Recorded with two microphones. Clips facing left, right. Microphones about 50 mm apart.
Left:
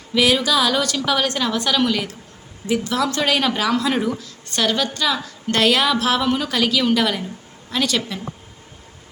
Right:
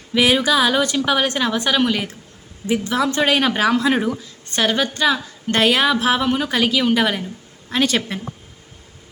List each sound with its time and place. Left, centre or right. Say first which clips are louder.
0.1 s a woman's voice: right 1 dB; right
4.2 s a woman's voice: right 1 dB; right